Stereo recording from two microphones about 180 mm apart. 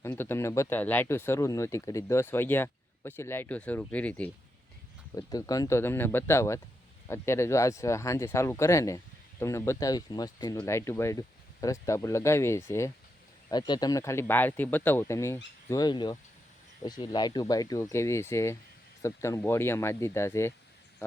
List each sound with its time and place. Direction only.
0.0 s speech: 15° left (ahead or behind)
5.1 s speech: 20° left (ahead or behind)